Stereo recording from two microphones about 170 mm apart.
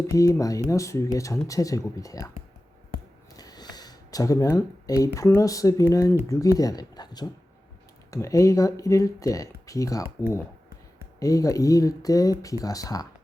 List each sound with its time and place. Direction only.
0.1 s speech: 20° left (ahead or behind)
3.3 s speech: 25° left (ahead or behind)